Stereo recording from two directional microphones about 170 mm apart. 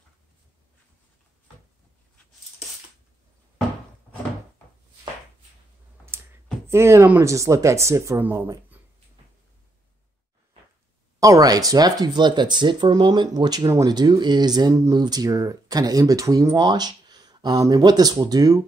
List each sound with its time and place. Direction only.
6.7 s speech: 15° right (ahead or behind)
11.1 s speech: 20° right (ahead or behind)